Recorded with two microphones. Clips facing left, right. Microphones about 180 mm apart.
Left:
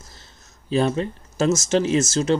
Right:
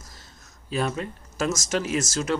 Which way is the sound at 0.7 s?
30° left (ahead or behind).